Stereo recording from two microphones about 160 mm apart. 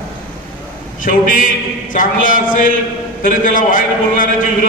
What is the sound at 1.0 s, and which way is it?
A man's voice, 55° left (ahead or behind).